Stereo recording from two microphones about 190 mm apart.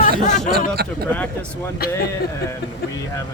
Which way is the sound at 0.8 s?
55° right (ahead or behind).